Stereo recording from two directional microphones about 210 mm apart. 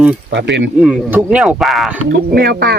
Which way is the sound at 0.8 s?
5° right (ahead or behind).